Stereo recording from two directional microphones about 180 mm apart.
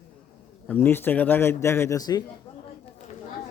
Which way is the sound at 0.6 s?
10° left (ahead or behind).